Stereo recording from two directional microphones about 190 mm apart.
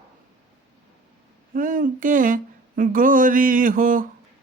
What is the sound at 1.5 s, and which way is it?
Speech, 45° right (ahead or behind).